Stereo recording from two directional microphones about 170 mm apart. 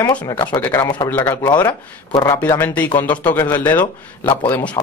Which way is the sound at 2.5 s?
10° left (ahead or behind).